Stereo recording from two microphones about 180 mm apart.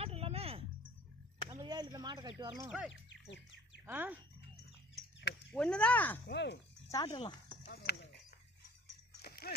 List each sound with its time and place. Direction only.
0.0 s music: 35° right (ahead or behind)
1.5 s a sound: 25° right (ahead or behind)
2.9 s bird: 80° left
3.8 s speech: 10° right (ahead or behind)
5.5 s speech: 5° left (ahead or behind)
6.2 s speech: 75° left (ahead or behind)
6.9 s speech: 20° left (ahead or behind)
7.6 s clip-clop: 65° left (ahead or behind)
9.1 s a sound: 60° left (ahead or behind)